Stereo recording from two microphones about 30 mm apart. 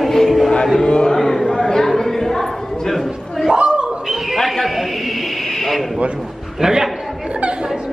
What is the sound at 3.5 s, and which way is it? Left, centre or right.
Bird, right.